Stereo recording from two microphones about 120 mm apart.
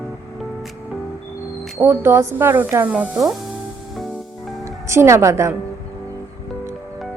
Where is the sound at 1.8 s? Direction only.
20° right (ahead or behind).